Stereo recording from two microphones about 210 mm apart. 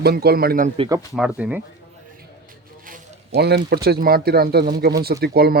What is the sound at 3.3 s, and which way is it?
Speech, 50° right (ahead or behind).